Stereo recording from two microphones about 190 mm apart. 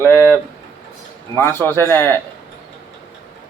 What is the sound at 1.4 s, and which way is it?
Speech, 10° left (ahead or behind).